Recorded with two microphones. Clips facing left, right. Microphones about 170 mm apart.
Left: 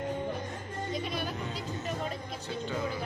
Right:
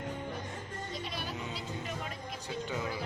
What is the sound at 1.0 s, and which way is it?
Music, 50° left (ahead or behind).